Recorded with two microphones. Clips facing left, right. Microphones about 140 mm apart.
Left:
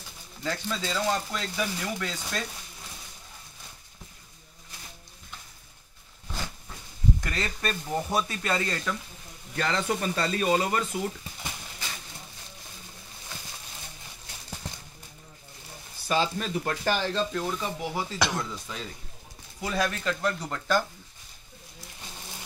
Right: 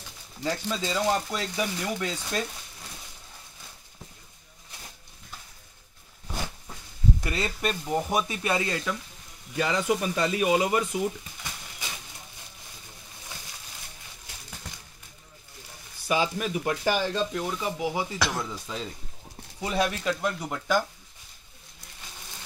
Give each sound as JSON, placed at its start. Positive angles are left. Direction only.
{"t": 0.5, "sound": "speech", "side_deg": -10}
{"t": 6.2, "sound": "a sound", "side_deg": -15}
{"t": 7.2, "sound": "speech", "side_deg": -15}
{"t": 16.1, "sound": "speech", "side_deg": -10}